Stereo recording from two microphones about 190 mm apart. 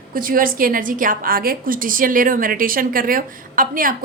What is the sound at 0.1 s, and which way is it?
A woman's voice, 45° right (ahead or behind).